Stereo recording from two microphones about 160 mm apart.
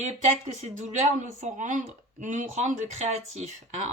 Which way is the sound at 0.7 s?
45° right (ahead or behind).